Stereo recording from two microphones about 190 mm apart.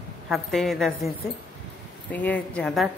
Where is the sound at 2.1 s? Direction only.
10° left (ahead or behind).